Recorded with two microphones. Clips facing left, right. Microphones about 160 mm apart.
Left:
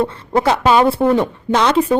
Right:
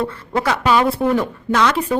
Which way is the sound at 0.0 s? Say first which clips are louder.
Left 4 dB; 25° left (ahead or behind).